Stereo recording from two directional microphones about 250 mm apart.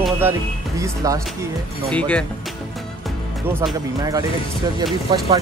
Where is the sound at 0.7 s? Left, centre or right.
Centre.